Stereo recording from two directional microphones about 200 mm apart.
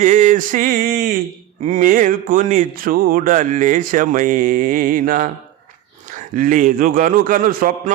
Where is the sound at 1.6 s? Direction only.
40° right (ahead or behind).